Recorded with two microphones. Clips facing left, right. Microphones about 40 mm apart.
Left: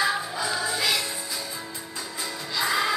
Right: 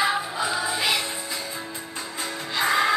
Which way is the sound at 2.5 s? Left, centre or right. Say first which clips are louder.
Right 3 dB; right.